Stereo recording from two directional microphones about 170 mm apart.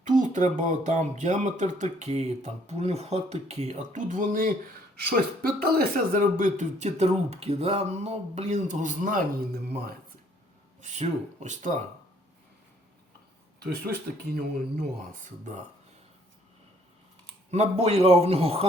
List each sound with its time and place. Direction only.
0.0 s speech: 45° right (ahead or behind)
10.8 s speech: 45° right (ahead or behind)
13.6 s speech: 65° right (ahead or behind)
17.5 s a man's voice: 40° right (ahead or behind)